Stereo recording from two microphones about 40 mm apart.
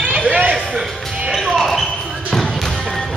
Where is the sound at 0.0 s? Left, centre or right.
Right.